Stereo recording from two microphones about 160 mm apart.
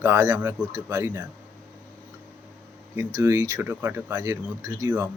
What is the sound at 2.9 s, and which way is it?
Speech, 15° right (ahead or behind).